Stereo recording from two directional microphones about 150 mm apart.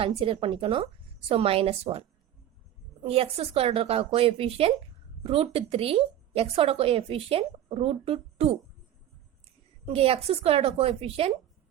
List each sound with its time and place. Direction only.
0.0 s a woman's voice: 40° right (ahead or behind)
9.8 s a woman's voice: 40° right (ahead or behind)